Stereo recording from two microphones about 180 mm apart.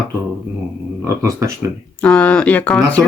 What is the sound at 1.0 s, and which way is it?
Speech, 15° right (ahead or behind).